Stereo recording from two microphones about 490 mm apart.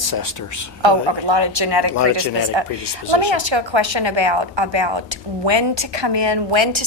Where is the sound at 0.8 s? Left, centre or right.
Right.